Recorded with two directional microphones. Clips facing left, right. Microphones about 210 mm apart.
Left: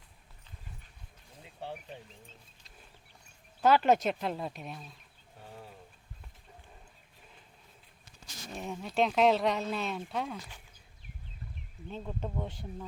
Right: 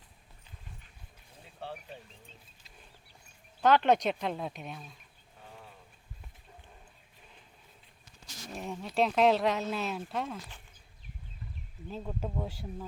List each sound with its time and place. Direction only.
1.6 s bird: 15° left (ahead or behind)
3.6 s speech: 5° left (ahead or behind)
8.5 s speech: centre (ahead or behind)
11.9 s speech: 5° right (ahead or behind)